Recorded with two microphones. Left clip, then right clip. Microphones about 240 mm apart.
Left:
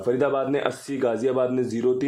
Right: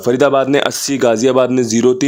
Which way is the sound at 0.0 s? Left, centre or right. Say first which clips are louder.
Right 10 dB; right.